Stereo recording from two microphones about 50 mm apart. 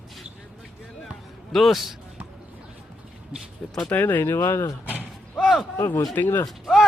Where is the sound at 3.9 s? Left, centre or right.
Left.